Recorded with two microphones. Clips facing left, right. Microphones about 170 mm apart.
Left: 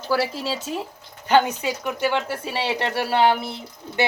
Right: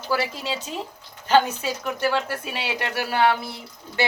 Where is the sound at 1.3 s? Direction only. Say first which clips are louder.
Left 1 dB; 15° left (ahead or behind).